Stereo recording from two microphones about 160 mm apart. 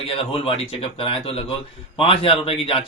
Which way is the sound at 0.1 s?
35° left (ahead or behind).